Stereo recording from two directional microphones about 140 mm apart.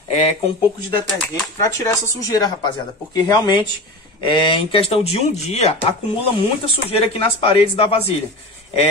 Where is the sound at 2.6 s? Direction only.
30° left (ahead or behind); by 5.9 s 50° left (ahead or behind).